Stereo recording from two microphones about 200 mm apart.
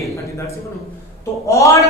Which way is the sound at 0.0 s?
15° left (ahead or behind).